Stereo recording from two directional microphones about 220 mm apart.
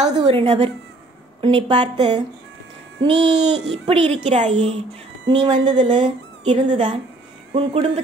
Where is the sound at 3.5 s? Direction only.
55° right (ahead or behind).